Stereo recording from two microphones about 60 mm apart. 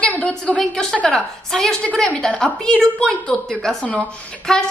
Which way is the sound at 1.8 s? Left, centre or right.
Left.